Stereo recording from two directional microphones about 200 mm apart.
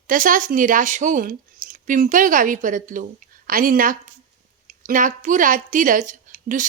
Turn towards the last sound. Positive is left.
turn(degrees=-40)  # may be behind; listen again after turning